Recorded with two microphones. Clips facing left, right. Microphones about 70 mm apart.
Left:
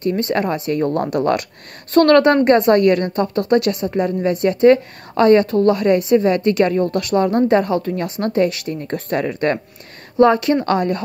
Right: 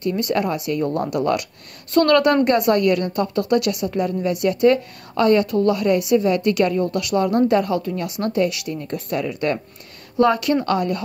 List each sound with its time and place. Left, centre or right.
0.2 s a woman's voice: left
10.1 s a woman's voice: left